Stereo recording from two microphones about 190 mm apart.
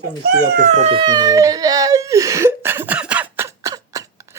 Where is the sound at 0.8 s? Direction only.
25° right (ahead or behind).